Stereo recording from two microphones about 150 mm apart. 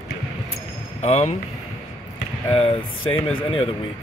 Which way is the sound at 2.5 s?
40° left (ahead or behind).